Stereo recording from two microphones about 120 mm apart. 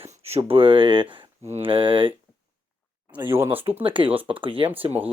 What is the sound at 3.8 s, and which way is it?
Speech, 45° right (ahead or behind).